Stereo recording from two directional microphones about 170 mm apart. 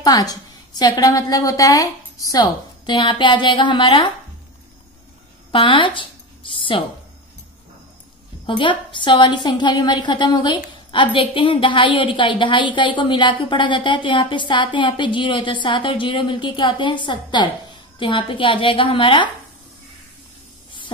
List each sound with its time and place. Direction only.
0.0 s a woman's voice: 20° left (ahead or behind)
5.5 s a sound: 30° left (ahead or behind)
8.5 s a woman's voice: 30° left (ahead or behind)